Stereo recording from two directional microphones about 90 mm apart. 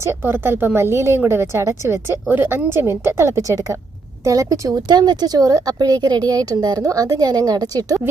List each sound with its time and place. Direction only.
0.0 s a woman's voice: 25° right (ahead or behind)
4.9 s a woman's voice: 50° right (ahead or behind)